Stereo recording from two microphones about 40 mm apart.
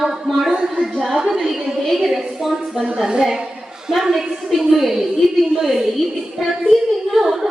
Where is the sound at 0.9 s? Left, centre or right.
Centre.